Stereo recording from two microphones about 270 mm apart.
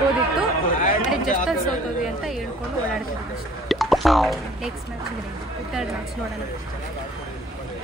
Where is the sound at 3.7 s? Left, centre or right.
Centre.